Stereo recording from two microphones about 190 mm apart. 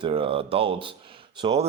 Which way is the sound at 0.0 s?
25° right (ahead or behind).